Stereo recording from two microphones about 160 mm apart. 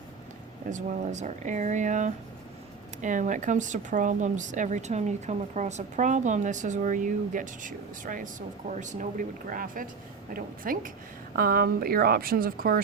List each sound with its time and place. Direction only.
0.7 s a woman's voice: 45° right (ahead or behind); by 12.8 s 65° right (ahead or behind)